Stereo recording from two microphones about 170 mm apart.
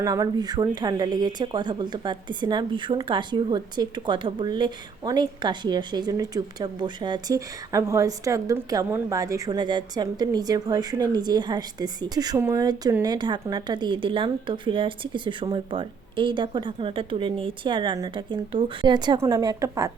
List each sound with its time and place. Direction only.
0.0 s a woman's voice: 20° right (ahead or behind)